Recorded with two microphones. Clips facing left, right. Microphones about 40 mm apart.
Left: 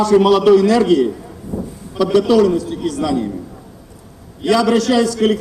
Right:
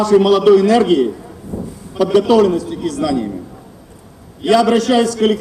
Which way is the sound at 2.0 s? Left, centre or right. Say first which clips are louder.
Right 1 dB; centre.